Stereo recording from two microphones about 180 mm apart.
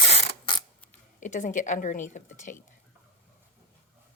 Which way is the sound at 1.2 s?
45° left (ahead or behind).